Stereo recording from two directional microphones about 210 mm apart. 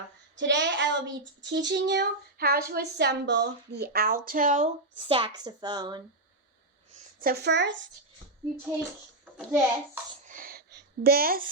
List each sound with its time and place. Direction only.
0.3 s a child's voice: 60° right (ahead or behind); by 6.0 s 20° right (ahead or behind)
6.9 s speech: 45° right (ahead or behind); by 7.9 s 60° right (ahead or behind)
9.5 s a child's voice: 10° right (ahead or behind)
10.2 s a sound: 40° right (ahead or behind)